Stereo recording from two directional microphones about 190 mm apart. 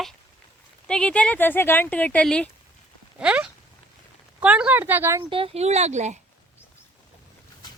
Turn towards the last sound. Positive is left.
turn(degrees=-35)  # may be behind; listen again after turning